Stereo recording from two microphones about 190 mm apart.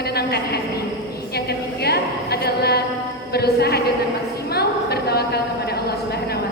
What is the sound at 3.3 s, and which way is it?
Speech, 55° left (ahead or behind).